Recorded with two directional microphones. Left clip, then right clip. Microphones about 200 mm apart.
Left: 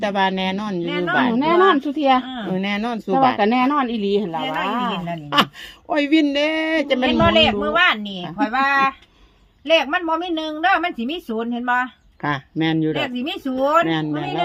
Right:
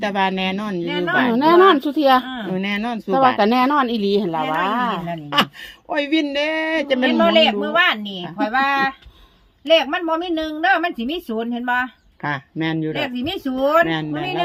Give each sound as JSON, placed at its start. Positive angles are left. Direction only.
{"t": 0.0, "sound": "a woman's voice", "side_deg": 5}
{"t": 1.3, "sound": "a woman's voice", "side_deg": -40}
{"t": 2.2, "sound": "a sound", "side_deg": -5}
{"t": 2.5, "sound": "a man's voice", "side_deg": 10}
{"t": 3.3, "sound": "a woman's voice", "side_deg": -40}
{"t": 5.1, "sound": "a man's voice", "side_deg": 10}
{"t": 7.3, "sound": "a woman's voice", "side_deg": -5}
{"t": 12.2, "sound": "a man's voice", "side_deg": 15}
{"t": 13.0, "sound": "a woman's voice", "side_deg": -5}